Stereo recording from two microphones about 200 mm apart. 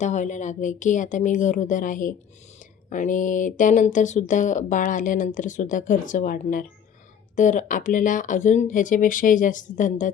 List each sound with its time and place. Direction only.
0.0 s speech: 35° left (ahead or behind)